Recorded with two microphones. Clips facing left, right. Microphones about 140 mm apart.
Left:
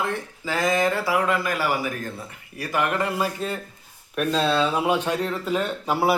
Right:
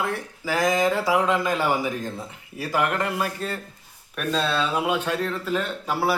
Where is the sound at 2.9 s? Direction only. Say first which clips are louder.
Left 1 dB; centre (ahead or behind).